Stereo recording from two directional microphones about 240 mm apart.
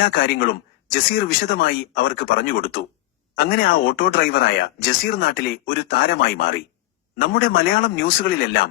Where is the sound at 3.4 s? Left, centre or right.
Left.